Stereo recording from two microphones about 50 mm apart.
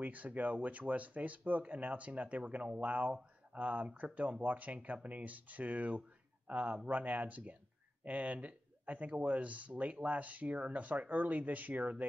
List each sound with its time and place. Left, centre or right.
0.0 s speech: right